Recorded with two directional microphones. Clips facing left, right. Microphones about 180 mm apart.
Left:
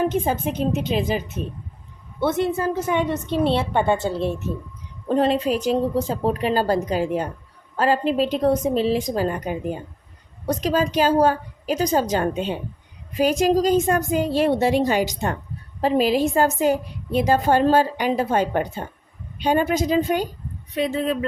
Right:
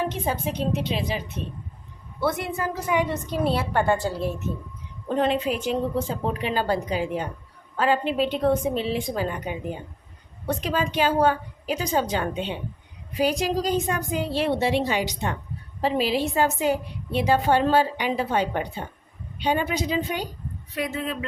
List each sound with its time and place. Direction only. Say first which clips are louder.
0.1 s a woman's voice: left 5 dB; 45° left (ahead or behind)
2.2 s a woman's voice: left 5 dB; 25° left (ahead or behind)
5.0 s a woman's voice: left 4 dB; 35° left (ahead or behind)
20.7 s a woman's voice: left 6 dB; 30° left (ahead or behind)